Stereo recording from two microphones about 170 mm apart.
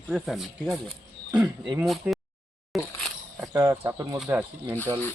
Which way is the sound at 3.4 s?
20° right (ahead or behind).